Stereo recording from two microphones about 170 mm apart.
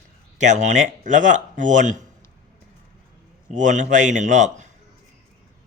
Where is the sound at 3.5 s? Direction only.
50° right (ahead or behind).